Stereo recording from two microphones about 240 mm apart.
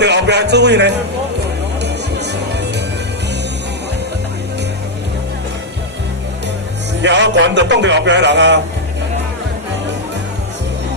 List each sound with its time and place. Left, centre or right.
0.0 s speech: right
1.8 s music: right
7.0 s speech: right